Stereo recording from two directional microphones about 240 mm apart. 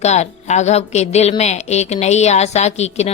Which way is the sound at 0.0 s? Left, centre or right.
Left.